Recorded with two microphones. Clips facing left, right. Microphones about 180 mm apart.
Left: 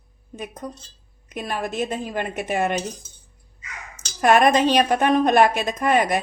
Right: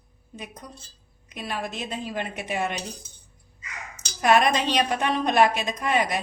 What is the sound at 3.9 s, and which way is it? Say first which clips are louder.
A woman's voice: left 3 dB; 50° left (ahead or behind).